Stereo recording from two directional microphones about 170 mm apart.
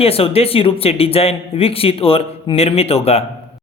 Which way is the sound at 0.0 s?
35° left (ahead or behind).